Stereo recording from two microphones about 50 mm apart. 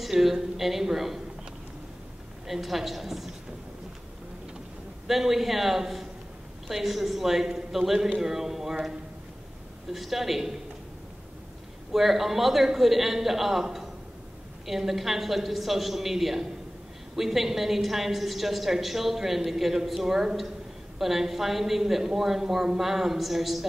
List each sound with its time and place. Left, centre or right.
0.0 s a woman's voice: centre
2.4 s a woman's voice: centre
5.0 s a woman's voice: centre
9.9 s a woman's voice: centre
11.9 s a woman's voice: centre